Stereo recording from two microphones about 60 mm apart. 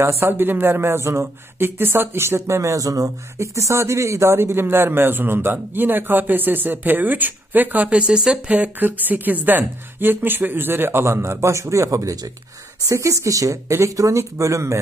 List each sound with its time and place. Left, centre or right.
0.0 s speech: right
3.3 s a man's voice: right